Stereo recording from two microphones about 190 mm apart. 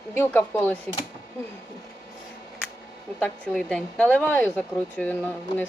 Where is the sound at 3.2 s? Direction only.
5° left (ahead or behind).